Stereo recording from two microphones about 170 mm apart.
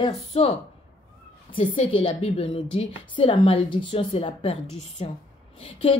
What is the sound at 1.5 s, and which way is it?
A woman's voice, 30° left (ahead or behind).